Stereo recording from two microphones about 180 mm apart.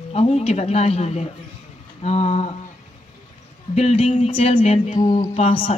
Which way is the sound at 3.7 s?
35° left (ahead or behind).